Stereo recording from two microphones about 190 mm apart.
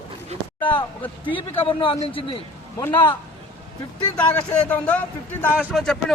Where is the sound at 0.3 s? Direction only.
35° right (ahead or behind).